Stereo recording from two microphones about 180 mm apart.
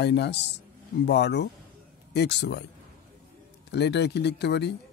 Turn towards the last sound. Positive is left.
turn(degrees=70)  # may be behind; listen again after turning